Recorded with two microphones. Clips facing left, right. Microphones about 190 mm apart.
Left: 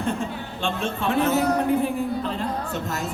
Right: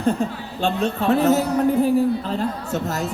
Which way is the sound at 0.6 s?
40° right (ahead or behind).